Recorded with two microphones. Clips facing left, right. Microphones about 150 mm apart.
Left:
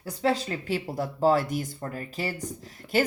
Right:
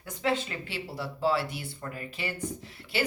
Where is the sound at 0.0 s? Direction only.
35° left (ahead or behind).